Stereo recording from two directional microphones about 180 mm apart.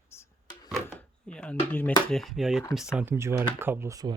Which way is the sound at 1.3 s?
5° left (ahead or behind).